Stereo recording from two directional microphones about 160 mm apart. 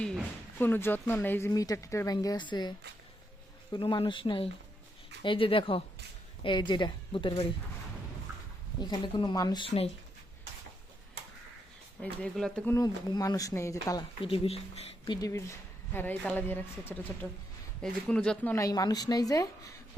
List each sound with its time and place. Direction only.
0.6 s a woman's voice: 15° left (ahead or behind); by 7.4 s 30° left (ahead or behind)
8.8 s speech: 30° left (ahead or behind)
12.0 s speech: 5° left (ahead or behind)
12.7 s speech: 25° left (ahead or behind)
14.2 s speech: 35° left (ahead or behind); by 18.6 s 10° left (ahead or behind)
18.6 s speech: 25° left (ahead or behind)